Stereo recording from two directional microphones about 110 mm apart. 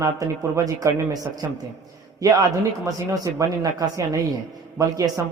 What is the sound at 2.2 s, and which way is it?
A man's voice, 35° right (ahead or behind).